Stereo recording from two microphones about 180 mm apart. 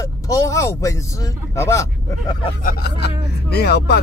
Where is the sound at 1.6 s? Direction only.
15° left (ahead or behind).